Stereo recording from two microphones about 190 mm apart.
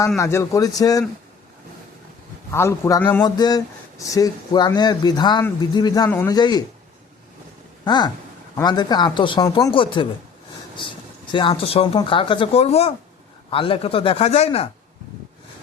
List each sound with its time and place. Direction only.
0.2 s speech: 15° left (ahead or behind)
2.5 s a man's voice: 15° left (ahead or behind)
3.2 s speech: 20° left (ahead or behind)
6.1 s a man's voice: 10° left (ahead or behind)
6.3 s speech: 20° left (ahead or behind)
7.9 s speech: 20° left (ahead or behind)